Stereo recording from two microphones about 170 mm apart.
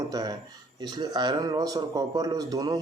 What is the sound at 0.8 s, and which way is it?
Speech, 25° right (ahead or behind).